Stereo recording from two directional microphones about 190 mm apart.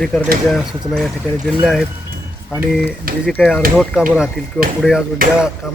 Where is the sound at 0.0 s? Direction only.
5° left (ahead or behind).